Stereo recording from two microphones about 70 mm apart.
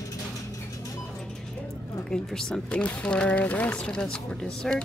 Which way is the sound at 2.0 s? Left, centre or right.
Centre.